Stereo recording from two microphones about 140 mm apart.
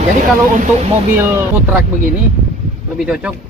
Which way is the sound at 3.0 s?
5° right (ahead or behind).